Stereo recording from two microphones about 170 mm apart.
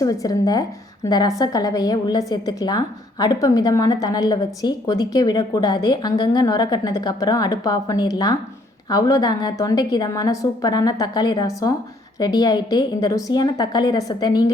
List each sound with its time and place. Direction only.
0.0 s a woman's voice: 20° left (ahead or behind)